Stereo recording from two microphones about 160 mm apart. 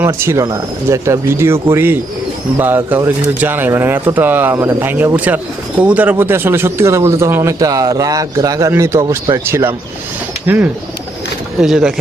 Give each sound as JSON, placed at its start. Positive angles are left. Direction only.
{"t": 0.0, "sound": "speech", "side_deg": -15}